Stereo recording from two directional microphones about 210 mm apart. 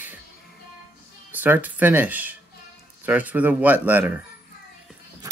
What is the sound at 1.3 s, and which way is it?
Speech, 10° right (ahead or behind).